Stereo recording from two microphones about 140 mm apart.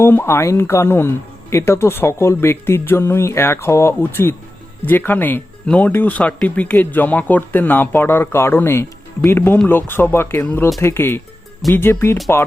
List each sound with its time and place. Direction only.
0.0 s speech: 15° left (ahead or behind)